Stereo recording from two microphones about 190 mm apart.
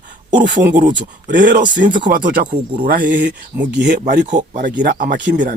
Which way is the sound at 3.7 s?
60° right (ahead or behind).